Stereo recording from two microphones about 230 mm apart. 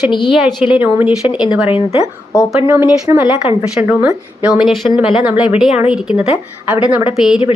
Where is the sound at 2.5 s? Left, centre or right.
Centre.